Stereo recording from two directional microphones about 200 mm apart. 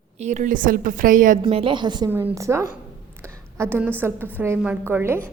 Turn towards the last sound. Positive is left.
turn(degrees=-10)  # may be behind; listen again after turning